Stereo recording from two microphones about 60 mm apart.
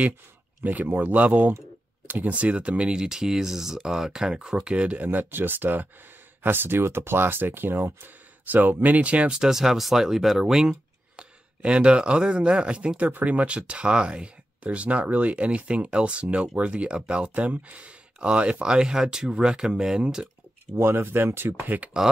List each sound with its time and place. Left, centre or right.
0.7 s speech: right
9.4 s speech: centre
20.7 s speech: right